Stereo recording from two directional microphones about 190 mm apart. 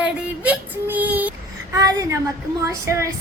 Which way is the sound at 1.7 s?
15° right (ahead or behind).